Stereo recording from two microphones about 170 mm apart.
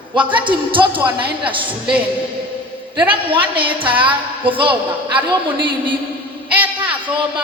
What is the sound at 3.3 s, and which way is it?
Speech, 30° right (ahead or behind).